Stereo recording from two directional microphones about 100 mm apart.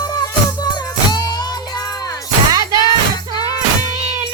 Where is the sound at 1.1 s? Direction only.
45° left (ahead or behind).